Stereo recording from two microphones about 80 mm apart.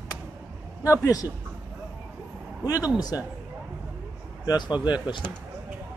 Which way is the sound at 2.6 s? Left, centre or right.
Left.